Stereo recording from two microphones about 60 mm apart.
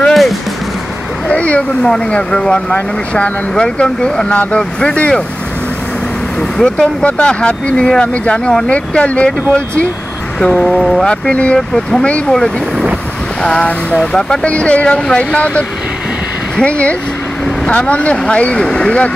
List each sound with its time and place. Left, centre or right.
0.1 s music: centre
1.3 s a sound: left
1.8 s speech: centre
6.6 s speech: centre
10.4 s speech: centre
11.1 s speech: centre
12.3 s speech: centre
17.6 s speech: left